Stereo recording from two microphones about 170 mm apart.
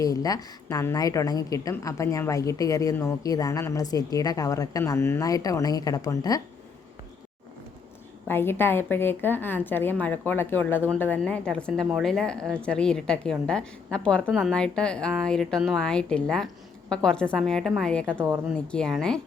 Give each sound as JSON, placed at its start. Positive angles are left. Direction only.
{"t": 0.0, "sound": "a woman's voice", "side_deg": 20}
{"t": 8.3, "sound": "a woman's voice", "side_deg": 10}